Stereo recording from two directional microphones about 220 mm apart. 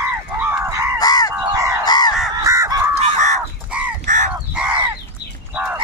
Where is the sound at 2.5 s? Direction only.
15° right (ahead or behind).